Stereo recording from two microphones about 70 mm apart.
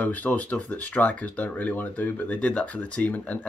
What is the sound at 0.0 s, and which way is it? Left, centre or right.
Speech, left.